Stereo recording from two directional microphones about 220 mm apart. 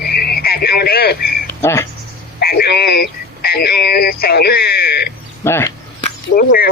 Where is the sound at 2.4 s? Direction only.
45° left (ahead or behind).